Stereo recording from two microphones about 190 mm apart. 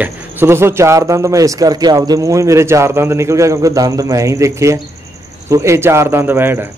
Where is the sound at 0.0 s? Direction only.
10° right (ahead or behind).